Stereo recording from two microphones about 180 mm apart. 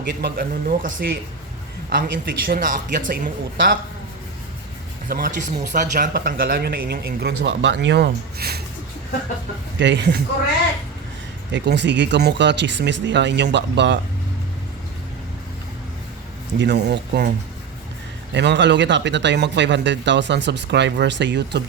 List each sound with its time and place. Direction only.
0.1 s speech: 65° right (ahead or behind); by 3.2 s 45° right (ahead or behind)
5.0 s speech: 55° right (ahead or behind)
9.7 s speech: 75° right (ahead or behind)
11.5 s speech: 75° right (ahead or behind)
16.6 s speech: 70° right (ahead or behind)
18.3 s speech: 75° right (ahead or behind)